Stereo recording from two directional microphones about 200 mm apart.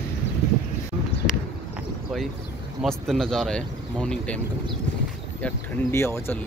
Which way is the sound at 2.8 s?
Centre (ahead or behind).